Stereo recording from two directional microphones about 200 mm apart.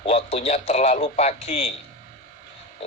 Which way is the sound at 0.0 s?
30° left (ahead or behind).